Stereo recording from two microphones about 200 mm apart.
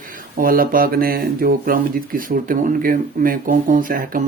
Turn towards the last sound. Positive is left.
turn(degrees=-45)  # may be behind; listen again after turning